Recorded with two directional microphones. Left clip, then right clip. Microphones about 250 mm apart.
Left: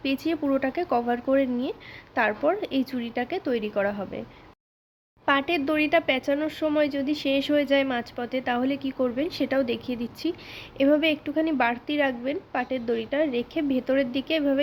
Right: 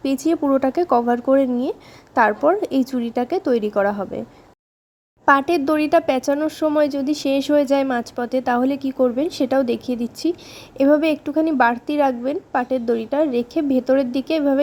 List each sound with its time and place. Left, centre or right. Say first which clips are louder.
0.0 s speech: right 7 dB; right
5.2 s speech: right 8 dB; right